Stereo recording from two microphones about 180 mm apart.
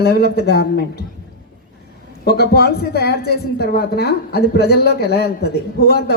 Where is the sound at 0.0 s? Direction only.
60° left (ahead or behind).